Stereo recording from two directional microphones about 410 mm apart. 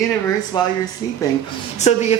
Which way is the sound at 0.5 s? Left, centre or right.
Centre.